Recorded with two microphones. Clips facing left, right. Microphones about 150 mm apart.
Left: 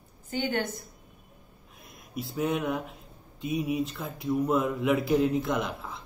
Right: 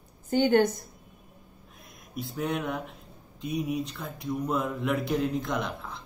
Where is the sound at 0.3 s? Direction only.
40° right (ahead or behind).